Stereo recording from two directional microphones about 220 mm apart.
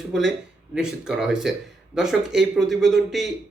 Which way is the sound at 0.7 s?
5° right (ahead or behind).